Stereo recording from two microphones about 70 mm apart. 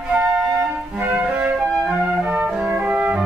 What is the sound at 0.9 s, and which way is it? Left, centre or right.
Flute, right.